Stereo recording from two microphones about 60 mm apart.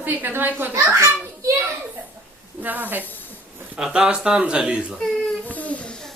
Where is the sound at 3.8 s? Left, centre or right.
Centre.